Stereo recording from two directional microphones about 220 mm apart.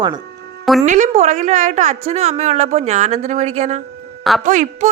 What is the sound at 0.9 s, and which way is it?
A woman's voice, 35° right (ahead or behind).